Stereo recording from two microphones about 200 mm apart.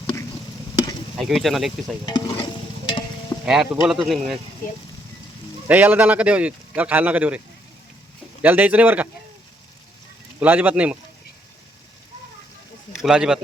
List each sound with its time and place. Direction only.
1.1 s speech: centre (ahead or behind)
2.0 s stir: 20° left (ahead or behind)
3.4 s speech: 5° right (ahead or behind)
5.6 s speech: 10° right (ahead or behind)
10.4 s speech: 10° right (ahead or behind)
12.9 s speech: centre (ahead or behind)